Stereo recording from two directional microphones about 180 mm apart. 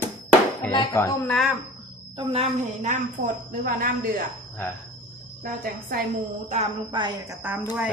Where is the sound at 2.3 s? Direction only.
45° right (ahead or behind).